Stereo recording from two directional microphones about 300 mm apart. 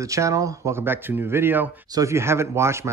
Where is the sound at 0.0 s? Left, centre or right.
Centre.